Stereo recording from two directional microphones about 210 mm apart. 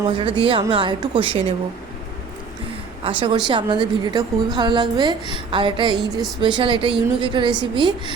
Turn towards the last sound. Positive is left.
turn(degrees=-20)  # may be behind; listen again after turning